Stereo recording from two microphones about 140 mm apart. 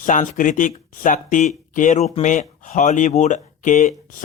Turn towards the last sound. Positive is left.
turn(degrees=60)  # may be behind; listen again after turning